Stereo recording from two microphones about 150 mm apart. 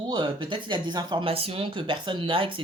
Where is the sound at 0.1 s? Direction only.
30° right (ahead or behind).